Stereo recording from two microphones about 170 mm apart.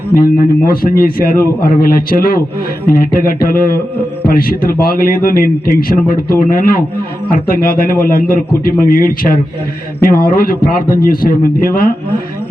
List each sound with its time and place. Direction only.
0.1 s a man's voice: 60° left (ahead or behind)